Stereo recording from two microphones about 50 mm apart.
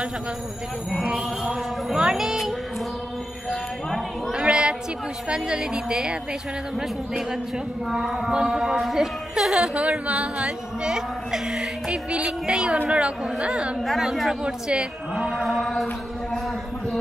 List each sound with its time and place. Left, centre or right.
1.1 s music: centre
4.3 s a sound: centre
5.3 s music: centre
7.9 s speech: centre
8.3 s music: centre
9.8 s speech: right
10.9 s music: centre
12.8 s speech: right
13.8 s speech: centre
14.4 s music: centre